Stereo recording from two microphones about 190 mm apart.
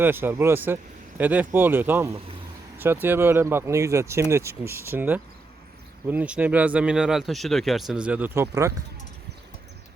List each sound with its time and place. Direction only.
0.0 s speech: 10° right (ahead or behind)